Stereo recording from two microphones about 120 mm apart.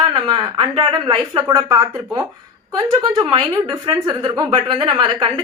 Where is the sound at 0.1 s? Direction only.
35° right (ahead or behind).